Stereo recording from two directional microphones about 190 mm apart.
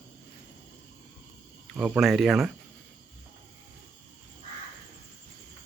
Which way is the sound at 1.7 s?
5° right (ahead or behind).